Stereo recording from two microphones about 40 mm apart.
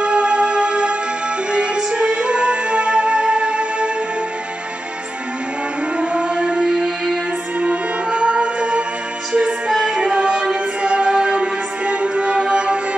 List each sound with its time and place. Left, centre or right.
0.0 s music: right
5.9 s music: right
7.6 s music: right